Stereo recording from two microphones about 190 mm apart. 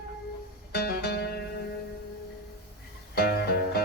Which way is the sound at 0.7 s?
55° left (ahead or behind).